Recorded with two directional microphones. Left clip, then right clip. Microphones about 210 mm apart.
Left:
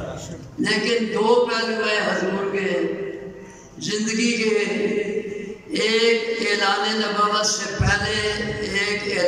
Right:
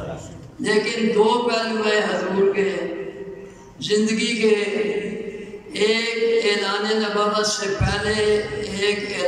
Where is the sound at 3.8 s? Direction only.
20° right (ahead or behind).